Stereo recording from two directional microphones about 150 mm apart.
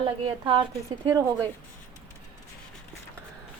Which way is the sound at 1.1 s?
20° right (ahead or behind).